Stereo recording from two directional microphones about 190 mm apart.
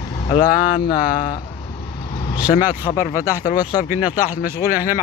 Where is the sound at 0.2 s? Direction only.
30° left (ahead or behind).